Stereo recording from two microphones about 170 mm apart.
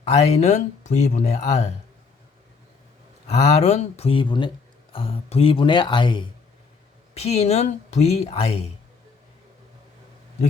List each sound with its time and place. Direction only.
0.1 s speech: 40° left (ahead or behind)
3.2 s speech: 40° left (ahead or behind)